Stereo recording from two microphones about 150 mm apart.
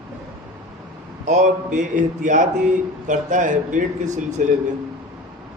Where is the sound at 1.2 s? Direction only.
55° right (ahead or behind).